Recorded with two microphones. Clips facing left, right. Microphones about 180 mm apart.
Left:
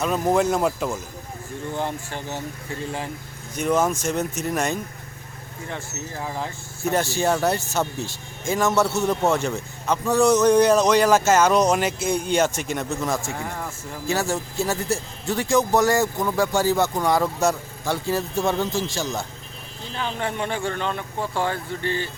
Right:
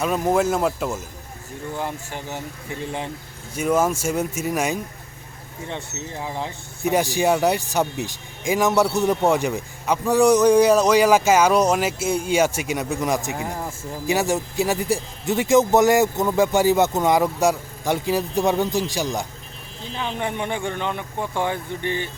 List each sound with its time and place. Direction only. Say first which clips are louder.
0.0 s speech: even; 5° right (ahead or behind); by 3.1 s 20° right (ahead or behind)
3.5 s speech: right 1 dB; 10° right (ahead or behind)
5.6 s speech: right 1 dB; 20° right (ahead or behind)
20.1 s speech: right 1 dB; 20° right (ahead or behind)